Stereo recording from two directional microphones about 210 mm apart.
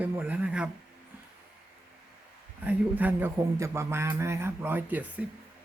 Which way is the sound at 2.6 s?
10° right (ahead or behind).